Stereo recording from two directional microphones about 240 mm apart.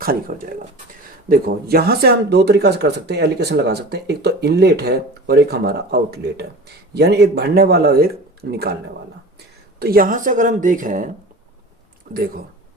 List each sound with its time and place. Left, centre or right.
0.0 s speech: right
9.7 s speech: right
12.1 s speech: right